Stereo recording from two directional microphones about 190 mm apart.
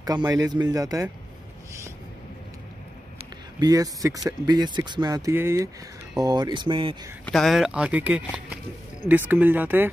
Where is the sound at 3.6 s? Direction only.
20° right (ahead or behind).